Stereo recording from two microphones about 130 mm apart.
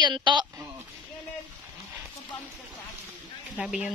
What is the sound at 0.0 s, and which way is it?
Speech, 35° right (ahead or behind).